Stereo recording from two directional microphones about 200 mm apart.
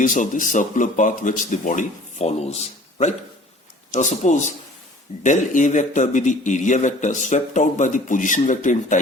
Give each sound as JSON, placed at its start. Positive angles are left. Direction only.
{"t": 0.0, "sound": "a man's voice", "side_deg": 40}